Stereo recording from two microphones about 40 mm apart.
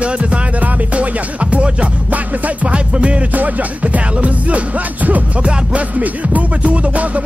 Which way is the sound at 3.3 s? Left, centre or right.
Right.